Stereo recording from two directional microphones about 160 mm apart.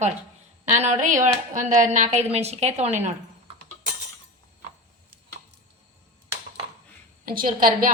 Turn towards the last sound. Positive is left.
turn(degrees=-60)  # may be behind; listen again after turning